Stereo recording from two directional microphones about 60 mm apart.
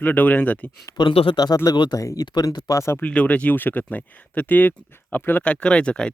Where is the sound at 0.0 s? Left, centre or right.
Left.